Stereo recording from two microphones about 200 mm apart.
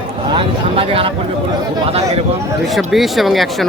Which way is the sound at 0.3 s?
30° right (ahead or behind).